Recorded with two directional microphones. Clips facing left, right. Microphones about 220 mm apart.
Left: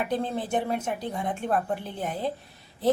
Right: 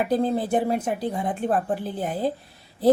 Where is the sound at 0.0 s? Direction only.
35° right (ahead or behind).